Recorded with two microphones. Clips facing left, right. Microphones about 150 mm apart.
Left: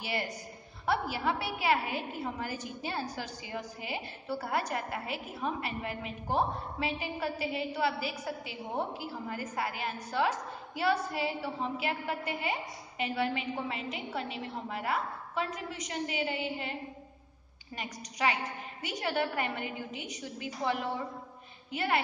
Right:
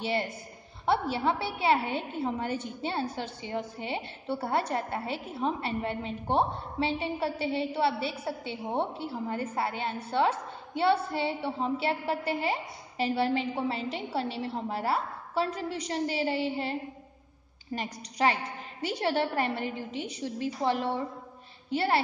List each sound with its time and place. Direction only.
0.0 s a woman's voice: 25° right (ahead or behind)
17.7 s a woman's voice: 35° right (ahead or behind)